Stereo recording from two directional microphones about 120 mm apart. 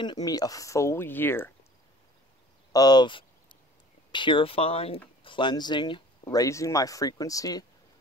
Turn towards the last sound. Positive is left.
turn(degrees=30)  # may be behind; listen again after turning